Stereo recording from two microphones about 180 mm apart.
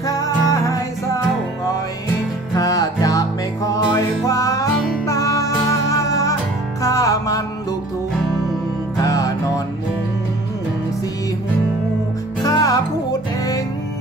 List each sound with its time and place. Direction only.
0.0 s music: 20° left (ahead or behind)
2.5 s music: 20° left (ahead or behind)
8.9 s music: 20° left (ahead or behind)
12.4 s music: 20° left (ahead or behind)